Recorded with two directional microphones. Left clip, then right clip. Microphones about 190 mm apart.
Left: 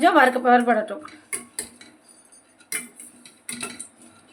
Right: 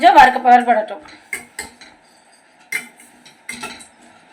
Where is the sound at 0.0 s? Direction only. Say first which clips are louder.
Right 8 dB; 45° left (ahead or behind).